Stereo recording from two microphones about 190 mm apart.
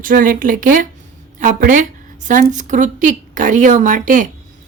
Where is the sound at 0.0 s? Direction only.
45° right (ahead or behind).